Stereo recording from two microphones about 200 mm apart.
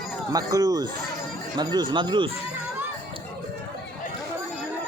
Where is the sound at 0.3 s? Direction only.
20° right (ahead or behind).